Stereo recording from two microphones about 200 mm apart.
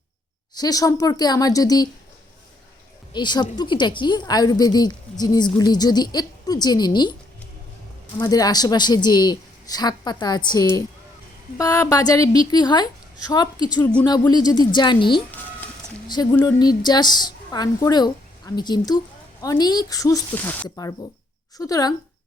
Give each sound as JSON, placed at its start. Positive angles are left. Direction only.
{"t": 0.5, "sound": "a woman's voice", "side_deg": 20}
{"t": 3.1, "sound": "a woman's voice", "side_deg": 20}
{"t": 8.2, "sound": "a woman's voice", "side_deg": 20}
{"t": 16.3, "sound": "a woman's voice", "side_deg": 15}